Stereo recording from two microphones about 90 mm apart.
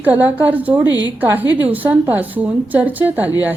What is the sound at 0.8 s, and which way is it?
Speech, 45° left (ahead or behind).